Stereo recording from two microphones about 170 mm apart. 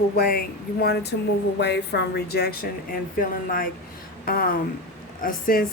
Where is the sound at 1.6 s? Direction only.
85° left; by 3.0 s 65° left (ahead or behind).